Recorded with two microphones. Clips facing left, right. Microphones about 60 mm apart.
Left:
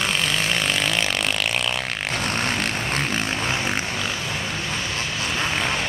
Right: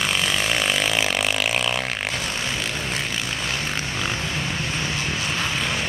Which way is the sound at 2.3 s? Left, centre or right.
Left.